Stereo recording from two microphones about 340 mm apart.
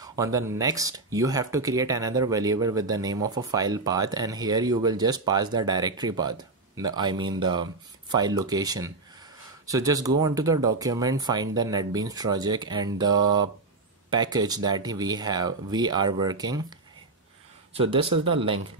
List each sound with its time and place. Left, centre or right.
0.0 s speech: centre
17.7 s speech: centre